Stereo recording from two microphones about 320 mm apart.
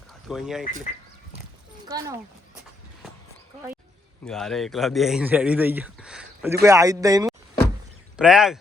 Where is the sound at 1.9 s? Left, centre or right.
Centre.